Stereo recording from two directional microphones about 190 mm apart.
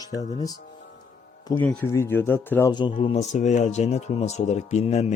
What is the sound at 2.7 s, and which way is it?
Speech, 25° left (ahead or behind).